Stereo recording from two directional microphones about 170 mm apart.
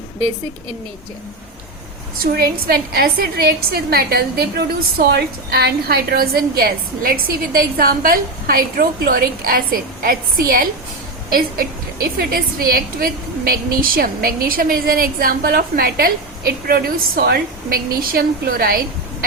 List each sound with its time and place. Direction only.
2.2 s a woman's voice: 65° right (ahead or behind)